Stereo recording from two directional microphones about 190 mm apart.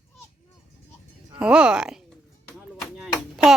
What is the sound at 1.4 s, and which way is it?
Speech, 5° right (ahead or behind).